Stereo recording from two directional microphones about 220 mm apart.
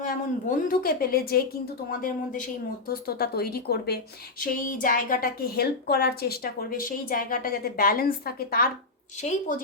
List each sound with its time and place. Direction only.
0.0 s a woman's voice: 40° left (ahead or behind)